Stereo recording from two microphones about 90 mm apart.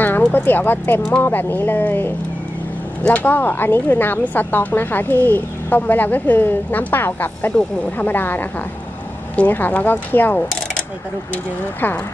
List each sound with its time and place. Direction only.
0.0 s speech: 20° left (ahead or behind)